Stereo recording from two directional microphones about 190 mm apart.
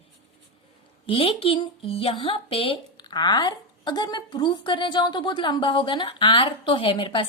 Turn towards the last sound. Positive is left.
turn(degrees=25)  # may be behind; listen again after turning